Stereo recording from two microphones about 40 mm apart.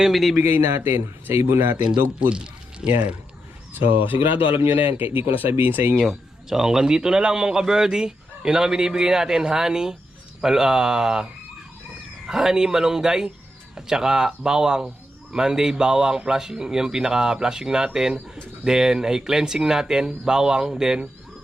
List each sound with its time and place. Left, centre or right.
0.1 s speech: centre
0.5 s speech: right
2.3 s a sound: right
3.8 s speech: right
6.5 s speech: centre
12.3 s speech: centre